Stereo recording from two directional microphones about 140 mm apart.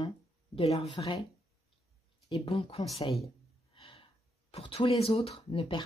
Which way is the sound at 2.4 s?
45° left (ahead or behind).